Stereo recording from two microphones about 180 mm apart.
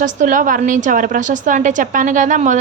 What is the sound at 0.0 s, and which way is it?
A woman's voice, 45° right (ahead or behind).